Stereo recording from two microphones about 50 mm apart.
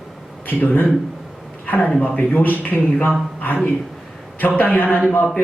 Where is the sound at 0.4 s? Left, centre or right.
Left.